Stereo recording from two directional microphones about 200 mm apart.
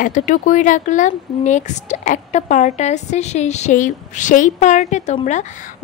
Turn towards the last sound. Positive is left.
turn(degrees=35)  # may be behind; listen again after turning